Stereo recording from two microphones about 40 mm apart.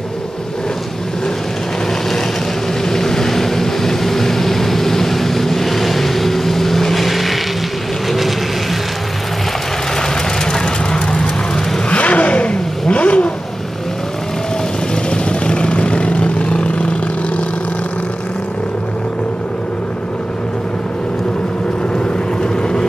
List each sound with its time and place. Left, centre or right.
2.8 s vehicle: centre
10.0 s vehicle: centre
11.9 s vehicle: left
15.0 s vehicle: left
22.0 s vehicle: left